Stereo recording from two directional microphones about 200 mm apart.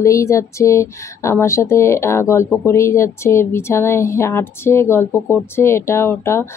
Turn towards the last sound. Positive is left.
turn(degrees=15)  # may be behind; listen again after turning